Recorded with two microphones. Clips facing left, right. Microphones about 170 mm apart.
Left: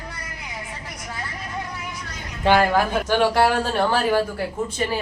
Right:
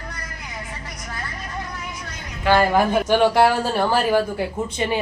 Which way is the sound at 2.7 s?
15° right (ahead or behind).